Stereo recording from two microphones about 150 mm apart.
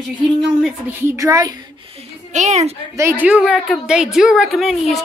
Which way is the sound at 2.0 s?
50° right (ahead or behind).